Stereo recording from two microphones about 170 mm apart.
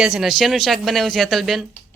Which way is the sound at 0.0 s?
Centre (ahead or behind).